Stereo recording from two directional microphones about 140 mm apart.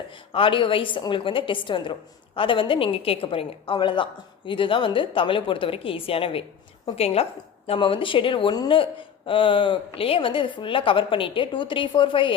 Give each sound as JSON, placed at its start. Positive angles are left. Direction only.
{"t": 0.3, "sound": "a woman's voice", "side_deg": 40}